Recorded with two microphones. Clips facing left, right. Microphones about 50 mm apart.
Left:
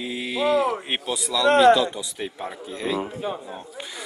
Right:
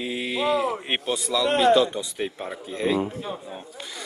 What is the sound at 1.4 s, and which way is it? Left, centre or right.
Speech, left.